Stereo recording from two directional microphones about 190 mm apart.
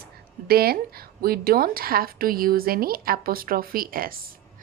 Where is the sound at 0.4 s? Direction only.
55° right (ahead or behind).